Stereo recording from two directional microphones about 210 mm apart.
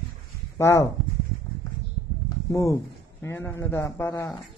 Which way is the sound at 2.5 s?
15° left (ahead or behind).